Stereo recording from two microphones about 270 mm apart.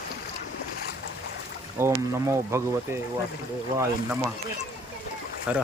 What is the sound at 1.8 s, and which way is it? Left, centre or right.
Speech, centre.